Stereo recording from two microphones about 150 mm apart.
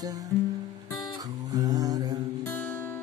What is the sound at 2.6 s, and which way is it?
Music, 15° left (ahead or behind).